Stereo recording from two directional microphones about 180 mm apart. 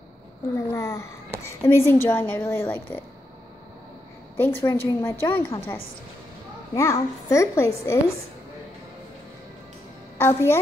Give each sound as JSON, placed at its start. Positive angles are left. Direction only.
{"t": 0.6, "sound": "a woman's voice", "side_deg": 15}
{"t": 4.4, "sound": "a woman's voice", "side_deg": 15}
{"t": 10.1, "sound": "a child's voice", "side_deg": 15}